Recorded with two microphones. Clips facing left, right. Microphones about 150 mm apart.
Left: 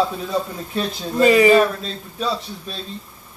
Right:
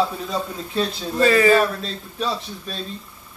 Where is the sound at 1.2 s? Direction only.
15° left (ahead or behind).